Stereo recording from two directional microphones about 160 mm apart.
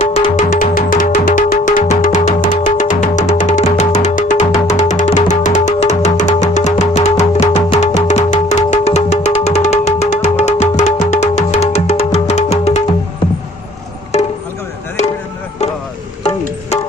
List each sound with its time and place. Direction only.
0.1 s music: 40° left (ahead or behind)
0.5 s music: 60° left (ahead or behind); by 12.8 s 45° left (ahead or behind)
14.1 s music: 45° left (ahead or behind)